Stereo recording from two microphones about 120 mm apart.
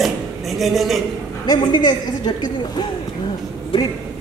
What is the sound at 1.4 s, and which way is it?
A woman's voice, 35° left (ahead or behind).